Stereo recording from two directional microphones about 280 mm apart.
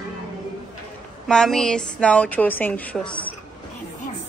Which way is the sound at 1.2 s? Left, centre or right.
Centre.